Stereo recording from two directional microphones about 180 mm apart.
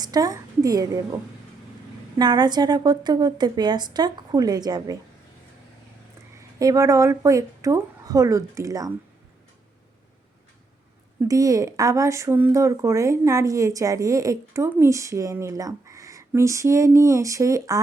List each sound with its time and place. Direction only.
0.0 s a sound: 20° right (ahead or behind)
2.1 s a woman's voice: 25° right (ahead or behind)
6.6 s a woman's voice: 20° right (ahead or behind)
11.2 s speech: 20° right (ahead or behind)